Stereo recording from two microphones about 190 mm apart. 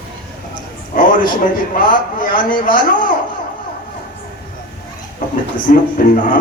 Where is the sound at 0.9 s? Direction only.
50° left (ahead or behind).